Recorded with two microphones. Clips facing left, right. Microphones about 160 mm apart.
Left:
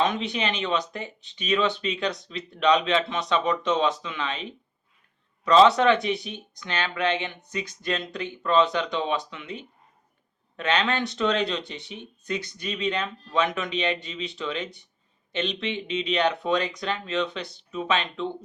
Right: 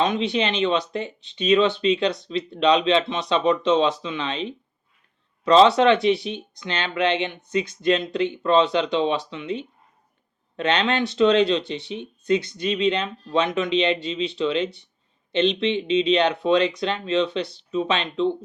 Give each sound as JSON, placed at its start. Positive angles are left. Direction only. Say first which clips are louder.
{"t": 0.0, "sound": "speech", "louder": "right 4 dB", "side_deg": -25}